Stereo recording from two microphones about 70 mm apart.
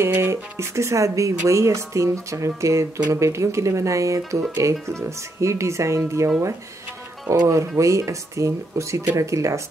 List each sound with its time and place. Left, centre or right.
0.0 s speech: right
7.4 s speech: right